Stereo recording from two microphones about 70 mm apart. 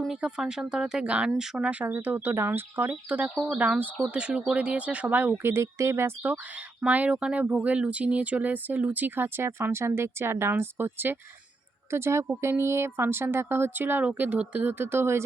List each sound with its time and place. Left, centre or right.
0.1 s speech: centre
1.8 s speech: right
2.9 s speech: right
6.8 s speech: centre; by 15.2 s right